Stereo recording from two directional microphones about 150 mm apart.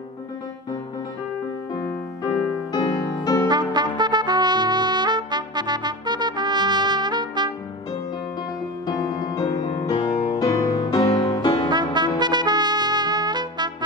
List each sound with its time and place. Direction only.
1.9 s music: 10° left (ahead or behind)
2.7 s music: 30° left (ahead or behind)
3.4 s trumpet: 30° right (ahead or behind)
8.8 s music: 25° left (ahead or behind)
11.7 s brass instrument: 30° right (ahead or behind)
12.2 s trumpet: 30° right (ahead or behind)